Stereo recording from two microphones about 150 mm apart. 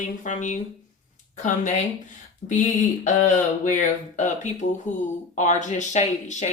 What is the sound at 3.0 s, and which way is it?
Speech, 55° left (ahead or behind).